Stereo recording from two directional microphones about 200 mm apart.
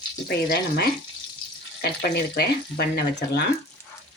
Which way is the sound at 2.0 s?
55° left (ahead or behind).